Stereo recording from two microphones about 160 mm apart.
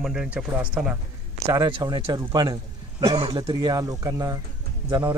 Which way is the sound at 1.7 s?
30° right (ahead or behind).